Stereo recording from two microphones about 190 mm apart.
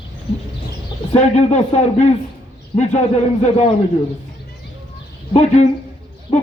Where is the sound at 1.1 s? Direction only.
35° left (ahead or behind).